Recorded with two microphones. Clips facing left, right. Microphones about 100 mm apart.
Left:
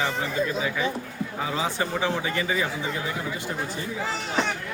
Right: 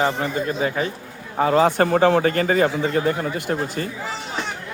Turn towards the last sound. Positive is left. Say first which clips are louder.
# right 6 dB
turn(degrees=-60)  # may be behind; listen again after turning